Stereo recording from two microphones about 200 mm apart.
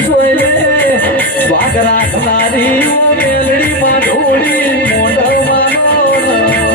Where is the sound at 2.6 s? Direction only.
10° left (ahead or behind).